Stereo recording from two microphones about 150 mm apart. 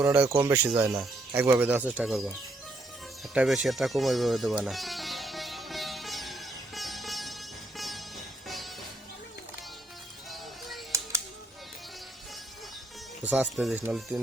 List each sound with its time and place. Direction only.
0.0 s speech: 10° right (ahead or behind)
3.3 s music: 5° right (ahead or behind)
10.9 s music: 20° right (ahead or behind)
13.2 s speech: 10° right (ahead or behind)